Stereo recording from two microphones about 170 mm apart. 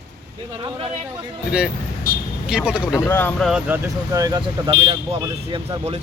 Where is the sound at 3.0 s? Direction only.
15° left (ahead or behind).